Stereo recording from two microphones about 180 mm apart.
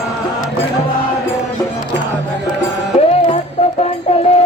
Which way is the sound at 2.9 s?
35° left (ahead or behind).